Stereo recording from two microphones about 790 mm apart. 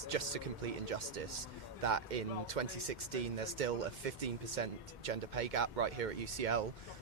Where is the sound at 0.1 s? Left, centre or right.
Right.